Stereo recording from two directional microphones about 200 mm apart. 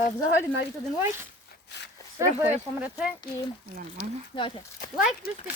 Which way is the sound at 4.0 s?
55° left (ahead or behind).